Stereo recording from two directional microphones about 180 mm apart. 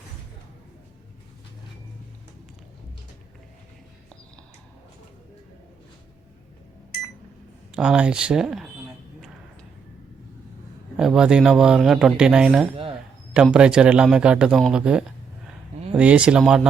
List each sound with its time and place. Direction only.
7.7 s speech: 5° right (ahead or behind)
10.9 s speech: 5° right (ahead or behind)
12.7 s a sound: 30° right (ahead or behind)
13.3 s speech: 5° right (ahead or behind)